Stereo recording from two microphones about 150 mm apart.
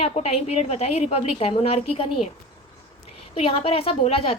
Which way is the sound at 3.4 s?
40° left (ahead or behind).